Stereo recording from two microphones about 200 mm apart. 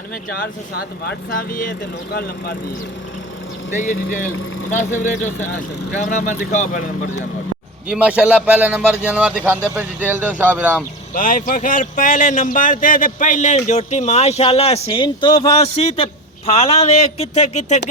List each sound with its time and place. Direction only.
0.8 s speech: 50° left (ahead or behind)
3.7 s speech: 40° left (ahead or behind)
3.9 s speech: 90° left
5.0 s speech: 40° left (ahead or behind)
7.9 s a man's voice: 5° right (ahead or behind)
11.1 s speech: 40° left (ahead or behind)